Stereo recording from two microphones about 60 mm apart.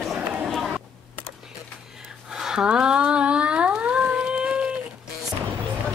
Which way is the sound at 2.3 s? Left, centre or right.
Centre.